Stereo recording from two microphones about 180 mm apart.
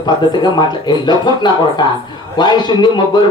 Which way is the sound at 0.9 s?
25° left (ahead or behind).